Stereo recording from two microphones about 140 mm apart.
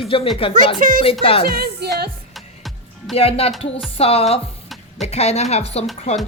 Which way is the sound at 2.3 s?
Centre (ahead or behind).